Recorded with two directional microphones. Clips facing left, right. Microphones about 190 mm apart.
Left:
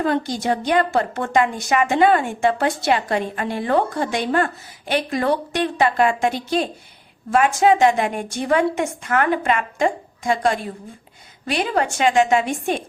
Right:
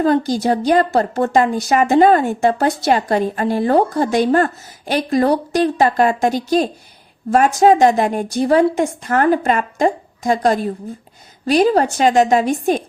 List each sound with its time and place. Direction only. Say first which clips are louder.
0.0 s a woman's voice: right 6 dB; 35° right (ahead or behind)